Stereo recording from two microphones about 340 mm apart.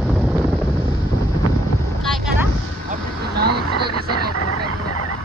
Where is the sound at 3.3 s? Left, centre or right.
Right.